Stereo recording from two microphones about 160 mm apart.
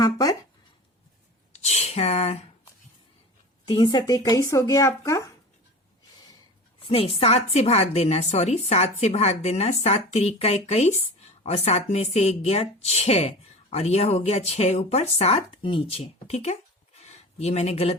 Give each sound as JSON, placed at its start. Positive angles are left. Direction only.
{"t": 0.0, "sound": "speech", "side_deg": 25}
{"t": 1.5, "sound": "a sound", "side_deg": 40}
{"t": 3.7, "sound": "speech", "side_deg": 30}
{"t": 6.8, "sound": "a woman's voice", "side_deg": 35}